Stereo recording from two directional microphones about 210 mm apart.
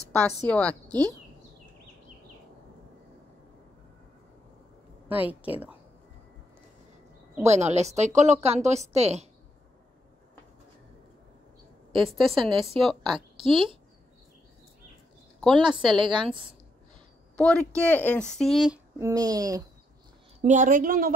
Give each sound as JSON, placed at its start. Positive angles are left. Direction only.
{"t": 0.1, "sound": "a woman's voice", "side_deg": 5}
{"t": 0.8, "sound": "a woman's voice", "side_deg": -20}
{"t": 5.0, "sound": "a woman's voice", "side_deg": -10}
{"t": 7.4, "sound": "speech", "side_deg": -30}
{"t": 12.1, "sound": "speech", "side_deg": 0}
{"t": 13.1, "sound": "a woman's voice", "side_deg": -25}
{"t": 15.6, "sound": "a woman's voice", "side_deg": -25}
{"t": 17.4, "sound": "speech", "side_deg": 5}
{"t": 18.9, "sound": "speech", "side_deg": -15}
{"t": 20.3, "sound": "speech", "side_deg": -35}